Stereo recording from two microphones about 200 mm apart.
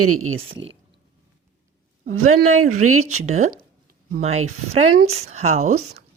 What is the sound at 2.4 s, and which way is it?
Speech, 90° right.